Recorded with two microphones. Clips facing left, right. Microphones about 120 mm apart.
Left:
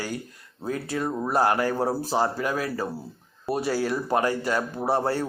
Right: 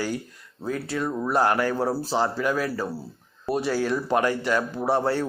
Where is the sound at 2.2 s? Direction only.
40° left (ahead or behind).